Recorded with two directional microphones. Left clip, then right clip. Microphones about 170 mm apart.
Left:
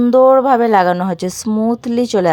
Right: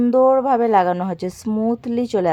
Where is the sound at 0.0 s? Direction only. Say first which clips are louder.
Left 5 dB; 15° left (ahead or behind).